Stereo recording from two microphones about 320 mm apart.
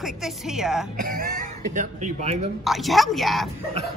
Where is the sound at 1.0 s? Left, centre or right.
Right.